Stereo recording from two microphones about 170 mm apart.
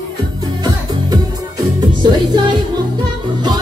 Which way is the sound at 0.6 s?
25° right (ahead or behind).